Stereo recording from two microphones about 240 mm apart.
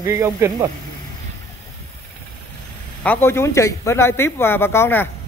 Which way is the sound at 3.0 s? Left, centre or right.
Centre.